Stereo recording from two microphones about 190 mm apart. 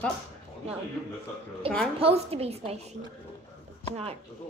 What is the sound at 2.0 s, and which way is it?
A woman's voice, 30° right (ahead or behind).